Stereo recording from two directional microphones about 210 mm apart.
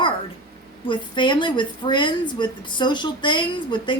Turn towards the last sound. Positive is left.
turn(degrees=20)  # may be behind; listen again after turning